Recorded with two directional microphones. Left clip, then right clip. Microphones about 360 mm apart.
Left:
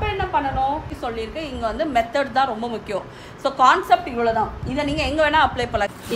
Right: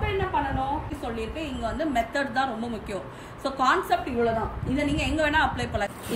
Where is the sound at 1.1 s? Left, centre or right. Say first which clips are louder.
Left 4 dB; centre.